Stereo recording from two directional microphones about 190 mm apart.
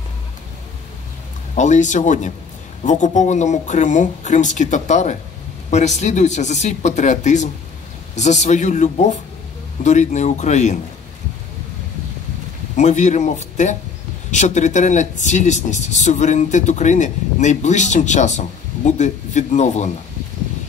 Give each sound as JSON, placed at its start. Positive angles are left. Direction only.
{"t": 1.5, "sound": "speech", "side_deg": 40}
{"t": 12.7, "sound": "speech", "side_deg": 40}